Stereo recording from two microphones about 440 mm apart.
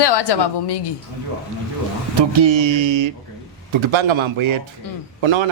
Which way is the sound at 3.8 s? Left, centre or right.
Right.